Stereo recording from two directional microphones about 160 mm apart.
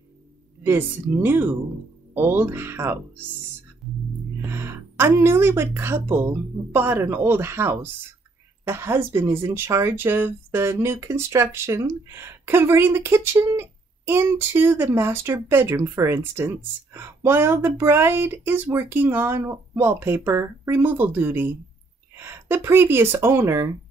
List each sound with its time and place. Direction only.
0.7 s speech: 15° right (ahead or behind)
4.4 s speech: 15° right (ahead or behind)